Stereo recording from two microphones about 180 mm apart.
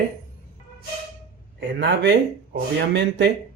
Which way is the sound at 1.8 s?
65° right (ahead or behind).